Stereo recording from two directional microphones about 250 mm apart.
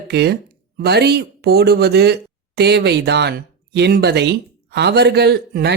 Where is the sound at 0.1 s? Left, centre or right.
Right.